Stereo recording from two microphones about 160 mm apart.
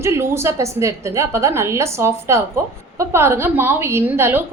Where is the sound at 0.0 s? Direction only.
15° right (ahead or behind).